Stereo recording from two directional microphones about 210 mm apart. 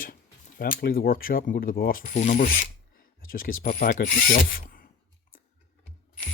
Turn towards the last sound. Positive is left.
turn(degrees=40)  # may be behind; listen again after turning